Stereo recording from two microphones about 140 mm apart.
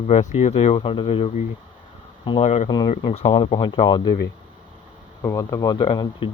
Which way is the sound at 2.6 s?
30° left (ahead or behind).